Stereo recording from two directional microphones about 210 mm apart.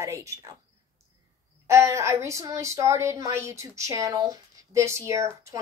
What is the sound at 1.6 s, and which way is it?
A woman's voice, 15° right (ahead or behind).